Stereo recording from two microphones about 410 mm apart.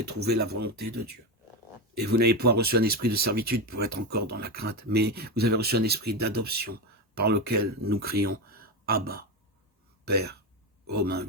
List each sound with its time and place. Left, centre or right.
0.0 s speech: right
2.0 s speech: right